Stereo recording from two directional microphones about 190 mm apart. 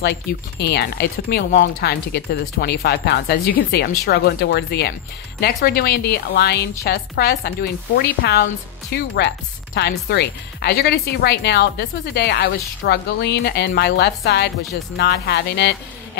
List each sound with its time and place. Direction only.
0.0 s speech: 60° left (ahead or behind)